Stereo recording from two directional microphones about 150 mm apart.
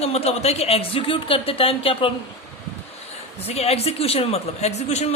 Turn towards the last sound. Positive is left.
turn(degrees=45)  # may be behind; listen again after turning